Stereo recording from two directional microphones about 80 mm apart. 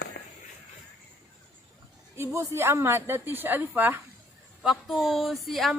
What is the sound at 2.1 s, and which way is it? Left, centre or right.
A woman's voice, right.